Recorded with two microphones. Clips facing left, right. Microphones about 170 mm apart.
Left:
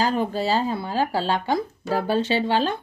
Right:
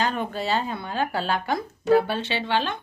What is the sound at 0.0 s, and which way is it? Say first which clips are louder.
Speech: left 4 dB; 35° left (ahead or behind).